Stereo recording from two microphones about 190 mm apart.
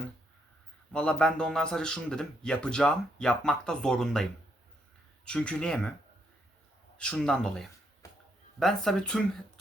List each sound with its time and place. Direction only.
0.9 s speech: 5° left (ahead or behind)
6.9 s speech: 5° left (ahead or behind)
8.0 s a sound: 15° left (ahead or behind)
8.5 s speech: centre (ahead or behind)